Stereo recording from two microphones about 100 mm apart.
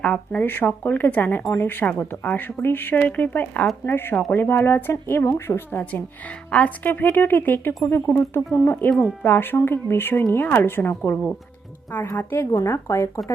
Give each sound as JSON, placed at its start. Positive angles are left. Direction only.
{"t": 0.0, "sound": "a woman's voice", "side_deg": 10}
{"t": 8.9, "sound": "speech", "side_deg": 0}
{"t": 9.2, "sound": "speech", "side_deg": 20}